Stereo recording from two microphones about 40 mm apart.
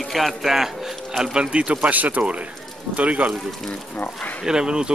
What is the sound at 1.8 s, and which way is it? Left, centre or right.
Speech, right.